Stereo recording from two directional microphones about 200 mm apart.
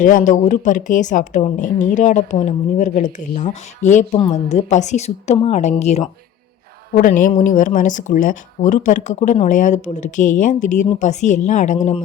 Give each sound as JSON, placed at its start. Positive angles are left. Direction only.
{"t": 0.0, "sound": "speech", "side_deg": 40}